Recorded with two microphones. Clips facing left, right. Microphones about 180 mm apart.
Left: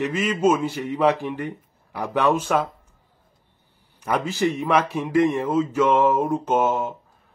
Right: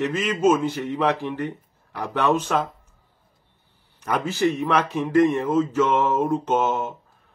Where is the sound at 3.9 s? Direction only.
10° left (ahead or behind).